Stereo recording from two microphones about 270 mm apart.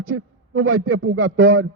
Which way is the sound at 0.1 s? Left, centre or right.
Right.